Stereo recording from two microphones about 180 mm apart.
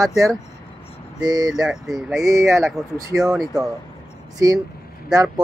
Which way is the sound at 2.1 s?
20° right (ahead or behind).